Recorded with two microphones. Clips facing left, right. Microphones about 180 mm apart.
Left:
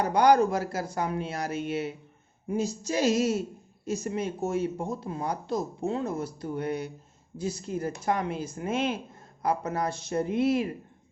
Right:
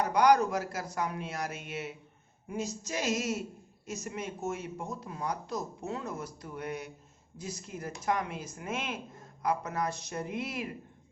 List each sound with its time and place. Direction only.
0.0 s speech: 30° left (ahead or behind)